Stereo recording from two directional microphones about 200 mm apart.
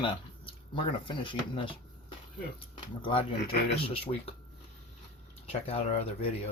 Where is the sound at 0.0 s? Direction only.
25° left (ahead or behind).